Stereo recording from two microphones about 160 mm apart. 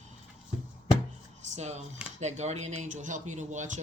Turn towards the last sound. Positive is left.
turn(degrees=-50)  # may be behind; listen again after turning